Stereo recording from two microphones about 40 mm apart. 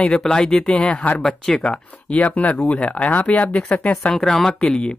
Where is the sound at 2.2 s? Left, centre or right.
Left.